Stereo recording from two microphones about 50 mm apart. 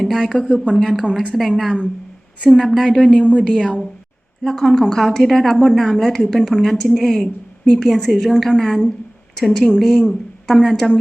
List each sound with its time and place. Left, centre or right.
0.0 s a woman's voice: centre
3.1 s a woman's voice: left; by 10.8 s centre